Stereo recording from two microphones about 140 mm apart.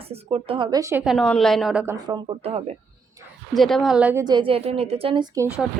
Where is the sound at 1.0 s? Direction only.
5° left (ahead or behind).